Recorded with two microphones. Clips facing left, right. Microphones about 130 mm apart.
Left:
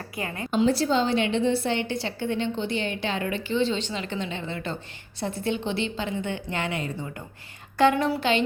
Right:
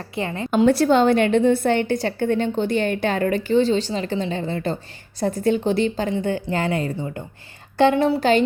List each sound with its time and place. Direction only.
0.2 s a woman's voice: 25° right (ahead or behind)
0.5 s a woman's voice: 60° right (ahead or behind); by 8.2 s 30° right (ahead or behind)
8.2 s a woman's voice: 40° right (ahead or behind)